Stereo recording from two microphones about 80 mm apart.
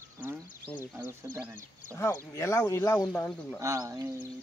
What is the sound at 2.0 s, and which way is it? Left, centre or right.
Speech, left.